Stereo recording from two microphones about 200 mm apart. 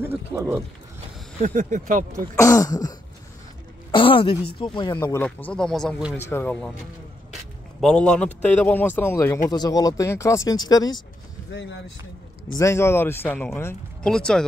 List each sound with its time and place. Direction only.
0.0 s speech: 10° right (ahead or behind)
1.4 s speech: 40° right (ahead or behind)
2.3 s a woman's voice: 15° left (ahead or behind); by 6.1 s centre (ahead or behind)
6.1 s speech: 10° left (ahead or behind)
7.8 s speech: 5° left (ahead or behind); by 11.0 s 20° left (ahead or behind)
11.5 s speech: 65° left (ahead or behind)
12.5 s speech: 15° left (ahead or behind)